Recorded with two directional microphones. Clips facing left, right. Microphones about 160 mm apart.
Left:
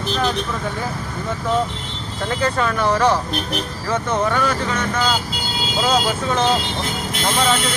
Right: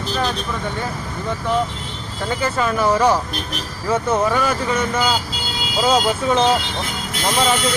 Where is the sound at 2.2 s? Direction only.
5° right (ahead or behind).